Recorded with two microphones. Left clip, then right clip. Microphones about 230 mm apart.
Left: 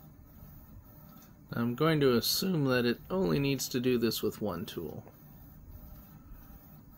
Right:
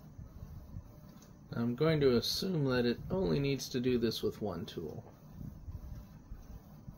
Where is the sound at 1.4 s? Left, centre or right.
Left.